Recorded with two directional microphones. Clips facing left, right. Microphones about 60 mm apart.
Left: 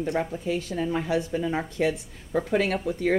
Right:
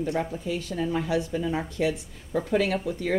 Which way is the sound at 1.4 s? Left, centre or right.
Left.